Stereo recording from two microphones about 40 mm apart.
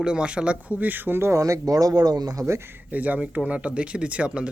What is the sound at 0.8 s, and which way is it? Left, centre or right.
Speech, right.